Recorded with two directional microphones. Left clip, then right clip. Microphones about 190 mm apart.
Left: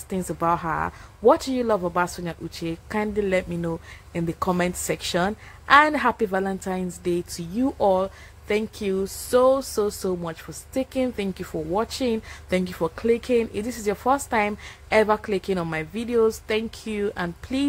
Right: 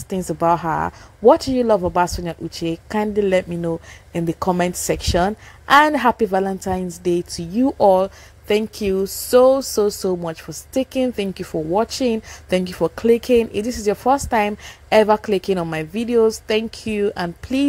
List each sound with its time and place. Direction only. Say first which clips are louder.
0.1 s speech: right 6 dB; 20° right (ahead or behind)